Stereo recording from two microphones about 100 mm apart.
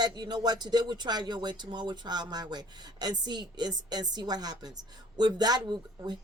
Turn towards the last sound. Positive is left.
turn(degrees=-45)  # may be behind; listen again after turning